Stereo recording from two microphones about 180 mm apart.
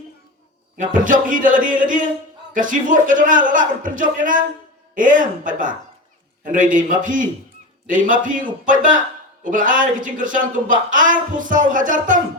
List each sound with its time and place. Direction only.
0.8 s a man's voice: 45° right (ahead or behind)